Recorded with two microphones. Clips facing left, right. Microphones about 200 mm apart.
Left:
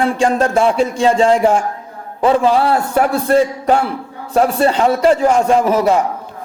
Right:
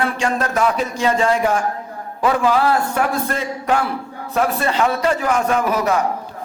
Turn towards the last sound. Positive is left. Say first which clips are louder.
# left 5 dB
turn(degrees=30)  # may be behind; listen again after turning